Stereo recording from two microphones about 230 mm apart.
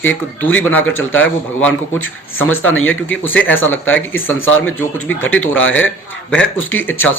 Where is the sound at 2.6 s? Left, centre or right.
Left.